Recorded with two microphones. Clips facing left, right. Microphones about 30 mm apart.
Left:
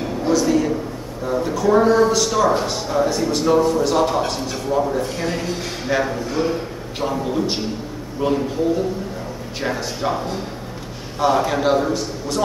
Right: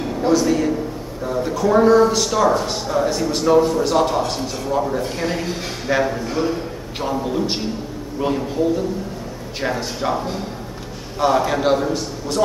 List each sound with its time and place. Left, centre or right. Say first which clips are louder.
0.2 s a sound: right 1 dB; centre
1.2 s a man's voice: left 1 dB; centre
9.6 s a man's voice: right 1 dB; centre
11.1 s a man's voice: even; centre